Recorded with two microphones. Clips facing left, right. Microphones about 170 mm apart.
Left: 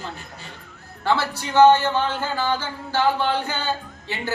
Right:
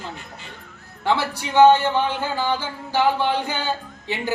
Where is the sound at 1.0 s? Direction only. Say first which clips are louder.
Even; 15° right (ahead or behind).